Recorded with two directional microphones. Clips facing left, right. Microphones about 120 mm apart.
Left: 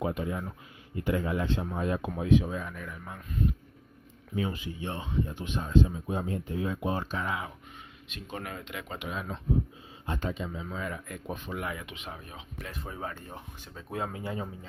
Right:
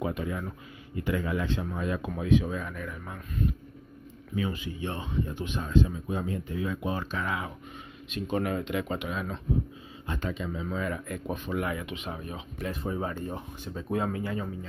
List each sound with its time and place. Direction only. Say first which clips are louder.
0.2 s speech: even; 20° left (ahead or behind)
0.9 s speech: even; 35° left (ahead or behind)
2.0 s speech: even; 15° left (ahead or behind)
4.4 s speech: right 1 dB; 25° left (ahead or behind)
8.3 s speech: right 10 dB; 15° right (ahead or behind)
9.0 s speech: right 3 dB; 15° left (ahead or behind)
10.0 s speech: even; 25° left (ahead or behind)
10.5 s speech: right 4 dB; 10° left (ahead or behind)
12.1 s speech: right 6 dB; 10° right (ahead or behind)
13.9 s speech: right 5 dB; 5° left (ahead or behind)
14.2 s speech: right 3 dB; 20° left (ahead or behind)